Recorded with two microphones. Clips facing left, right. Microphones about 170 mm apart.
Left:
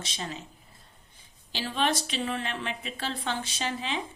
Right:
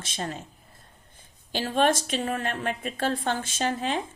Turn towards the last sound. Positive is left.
turn(degrees=-50)  # may be behind; listen again after turning